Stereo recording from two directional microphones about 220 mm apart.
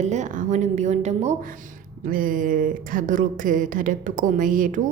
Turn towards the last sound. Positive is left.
turn(degrees=-35)  # may be behind; listen again after turning